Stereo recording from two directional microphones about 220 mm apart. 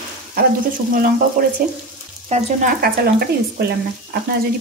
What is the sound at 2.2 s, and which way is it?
Speech, 35° right (ahead or behind).